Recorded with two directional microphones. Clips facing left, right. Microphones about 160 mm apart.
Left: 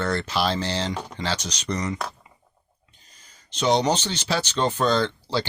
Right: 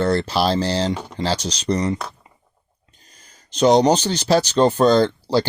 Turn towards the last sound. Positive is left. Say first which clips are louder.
# right 7 dB
turn(degrees=-40)  # may be behind; listen again after turning